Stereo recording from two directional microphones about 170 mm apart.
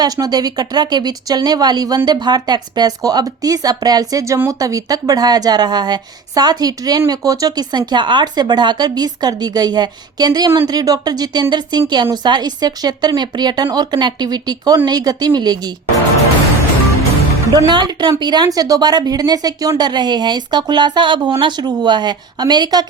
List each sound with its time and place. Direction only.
0.0 s speech: 25° right (ahead or behind)
17.5 s speech: 25° right (ahead or behind)